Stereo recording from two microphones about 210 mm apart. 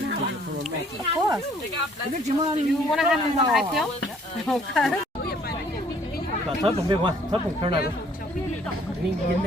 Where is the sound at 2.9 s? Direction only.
Centre (ahead or behind).